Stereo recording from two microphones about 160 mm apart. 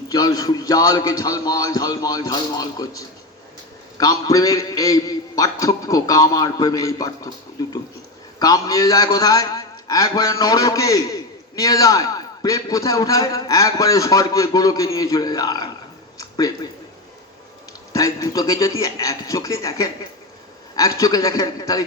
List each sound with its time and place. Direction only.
0.1 s a man's voice: 25° left (ahead or behind)
8.4 s a man's voice: 25° left (ahead or behind)
17.9 s a man's voice: 20° left (ahead or behind)